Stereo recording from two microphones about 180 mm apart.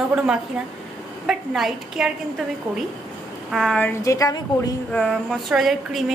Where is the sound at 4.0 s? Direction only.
20° left (ahead or behind).